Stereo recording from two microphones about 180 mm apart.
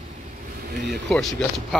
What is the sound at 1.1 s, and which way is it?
Speech, centre (ahead or behind).